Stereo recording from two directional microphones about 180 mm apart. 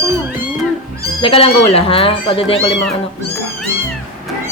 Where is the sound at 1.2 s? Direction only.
30° left (ahead or behind).